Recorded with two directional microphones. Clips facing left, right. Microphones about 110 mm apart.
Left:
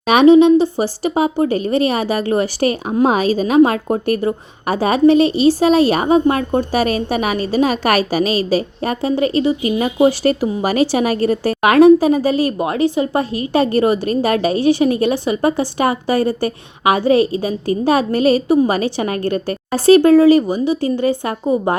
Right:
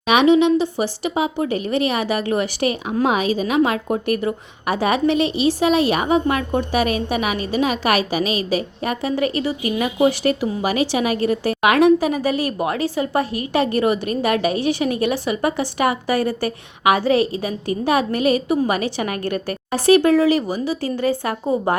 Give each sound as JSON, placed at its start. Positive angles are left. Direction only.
{"t": 0.0, "sound": "a woman's voice", "side_deg": 40}